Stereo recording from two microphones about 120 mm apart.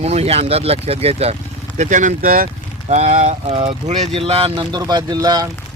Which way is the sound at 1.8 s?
90° right.